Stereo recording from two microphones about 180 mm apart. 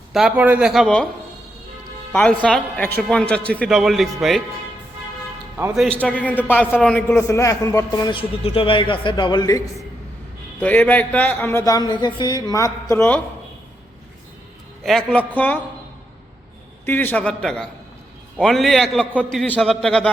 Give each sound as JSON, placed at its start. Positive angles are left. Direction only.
{"t": 0.1, "sound": "speech", "side_deg": 0}
{"t": 2.4, "sound": "speech", "side_deg": 5}
{"t": 5.7, "sound": "speech", "side_deg": 0}
{"t": 6.0, "sound": "a man's voice", "side_deg": 10}
{"t": 10.6, "sound": "a man's voice", "side_deg": 10}
{"t": 14.8, "sound": "a man's voice", "side_deg": 5}
{"t": 16.8, "sound": "a man's voice", "side_deg": 10}